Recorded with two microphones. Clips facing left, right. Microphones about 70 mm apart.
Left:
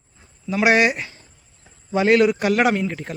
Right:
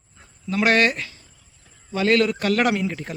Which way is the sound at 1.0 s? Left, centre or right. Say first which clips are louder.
Left 1 dB; left.